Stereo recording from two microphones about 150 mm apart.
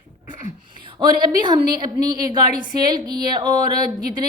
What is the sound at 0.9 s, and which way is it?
A woman's voice, 30° right (ahead or behind).